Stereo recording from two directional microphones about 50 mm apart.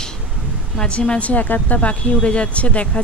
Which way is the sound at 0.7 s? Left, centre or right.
Centre.